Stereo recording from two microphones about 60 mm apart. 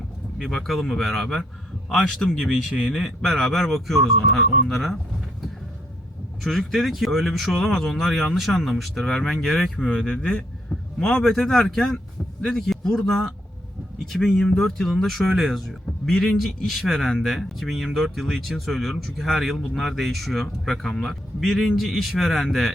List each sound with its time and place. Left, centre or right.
0.3 s speech: centre
2.0 s speech: centre
2.7 s speech: centre
6.4 s speech: centre